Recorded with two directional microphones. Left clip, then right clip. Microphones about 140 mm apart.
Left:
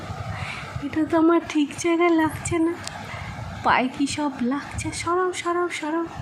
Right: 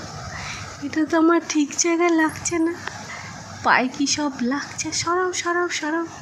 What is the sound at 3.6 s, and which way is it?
Speech, 5° left (ahead or behind).